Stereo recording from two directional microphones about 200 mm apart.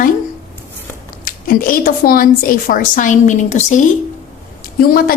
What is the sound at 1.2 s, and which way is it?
Speech, 45° left (ahead or behind).